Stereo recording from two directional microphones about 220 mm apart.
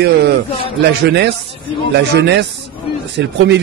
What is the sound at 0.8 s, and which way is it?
A man's voice, 50° right (ahead or behind).